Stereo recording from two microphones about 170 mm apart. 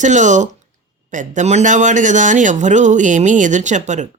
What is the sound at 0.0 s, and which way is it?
Speech, 45° right (ahead or behind).